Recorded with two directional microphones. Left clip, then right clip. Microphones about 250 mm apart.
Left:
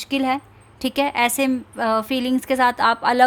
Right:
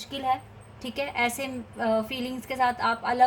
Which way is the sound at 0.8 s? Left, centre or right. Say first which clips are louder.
Left 8 dB; left.